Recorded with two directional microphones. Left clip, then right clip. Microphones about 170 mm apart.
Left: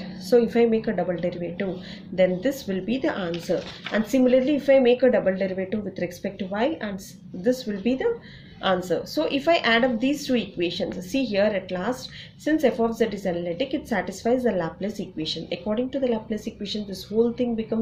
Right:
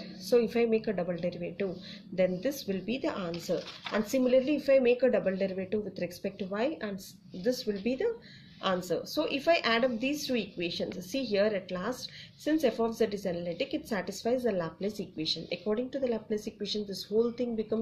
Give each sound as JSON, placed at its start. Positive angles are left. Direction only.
{"t": 0.3, "sound": "a woman's voice", "side_deg": -25}